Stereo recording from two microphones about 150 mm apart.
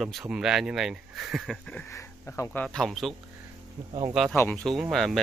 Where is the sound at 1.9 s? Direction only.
20° left (ahead or behind).